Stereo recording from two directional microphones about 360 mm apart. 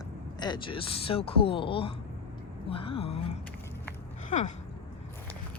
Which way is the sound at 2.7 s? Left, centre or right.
Centre.